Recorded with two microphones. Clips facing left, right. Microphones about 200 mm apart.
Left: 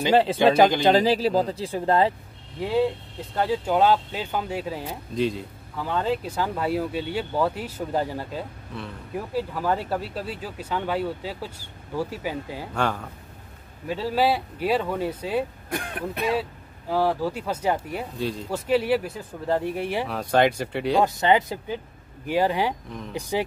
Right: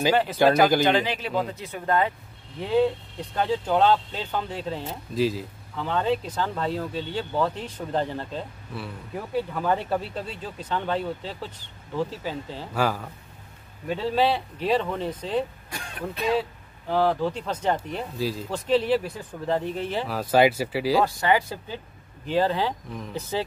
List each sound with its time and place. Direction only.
0.1 s speech: 30° left (ahead or behind)
3.3 s speech: 10° left (ahead or behind)
5.1 s speech: 5° right (ahead or behind)
5.8 s speech: 10° left (ahead or behind)
9.5 s speech: 5° left (ahead or behind)
12.7 s speech: 5° right (ahead or behind)
13.8 s speech: 5° left (ahead or behind)
15.7 s speech: 55° left (ahead or behind)
16.9 s speech: 10° left (ahead or behind)
20.1 s speech: 5° right (ahead or behind)
21.0 s speech: 20° left (ahead or behind)